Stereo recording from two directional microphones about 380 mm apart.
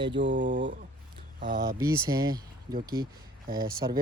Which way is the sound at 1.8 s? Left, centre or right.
Centre.